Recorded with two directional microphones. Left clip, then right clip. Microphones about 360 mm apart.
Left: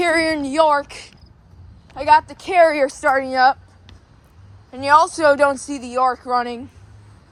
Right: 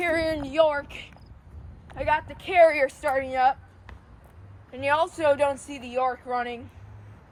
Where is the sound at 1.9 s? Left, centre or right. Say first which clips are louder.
Left 11 dB; centre.